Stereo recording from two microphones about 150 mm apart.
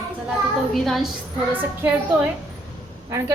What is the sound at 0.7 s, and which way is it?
Speech, centre (ahead or behind).